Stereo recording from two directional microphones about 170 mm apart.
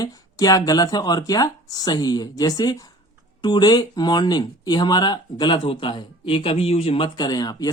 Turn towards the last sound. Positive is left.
turn(degrees=25)  # may be behind; listen again after turning